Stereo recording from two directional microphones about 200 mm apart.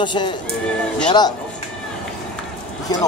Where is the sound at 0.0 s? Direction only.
25° left (ahead or behind).